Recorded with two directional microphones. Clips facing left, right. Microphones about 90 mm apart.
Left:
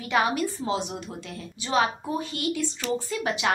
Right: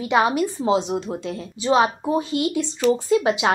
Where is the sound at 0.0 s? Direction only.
20° right (ahead or behind).